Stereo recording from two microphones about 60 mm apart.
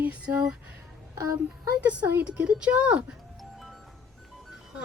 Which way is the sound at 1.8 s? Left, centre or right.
Centre.